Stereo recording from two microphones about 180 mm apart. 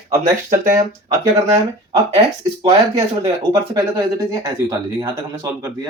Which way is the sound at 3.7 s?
20° right (ahead or behind).